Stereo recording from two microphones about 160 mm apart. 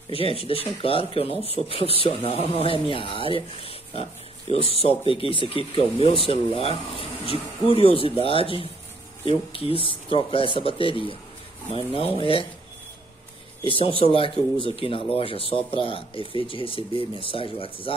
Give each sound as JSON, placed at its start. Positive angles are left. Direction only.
{"t": 0.1, "sound": "speech", "side_deg": 35}
{"t": 13.7, "sound": "speech", "side_deg": 35}